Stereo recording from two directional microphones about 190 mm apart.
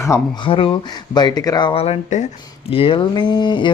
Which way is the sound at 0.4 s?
30° left (ahead or behind).